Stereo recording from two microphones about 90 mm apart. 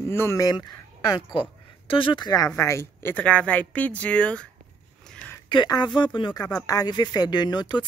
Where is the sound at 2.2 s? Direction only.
45° left (ahead or behind).